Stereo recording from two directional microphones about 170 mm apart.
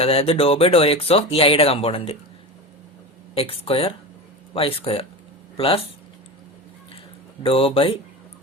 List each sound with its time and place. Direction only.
0.0 s speech: 35° left (ahead or behind)
3.3 s speech: 35° left (ahead or behind)
7.4 s speech: 35° left (ahead or behind)